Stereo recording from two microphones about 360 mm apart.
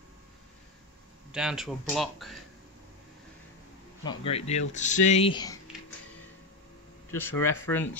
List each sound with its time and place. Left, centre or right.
1.3 s speech: centre
4.0 s speech: centre
7.1 s speech: centre